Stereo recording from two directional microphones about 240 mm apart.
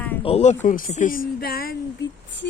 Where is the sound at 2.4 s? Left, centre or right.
Left.